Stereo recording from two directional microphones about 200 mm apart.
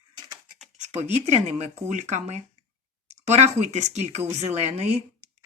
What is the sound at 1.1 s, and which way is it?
Speech, 35° right (ahead or behind).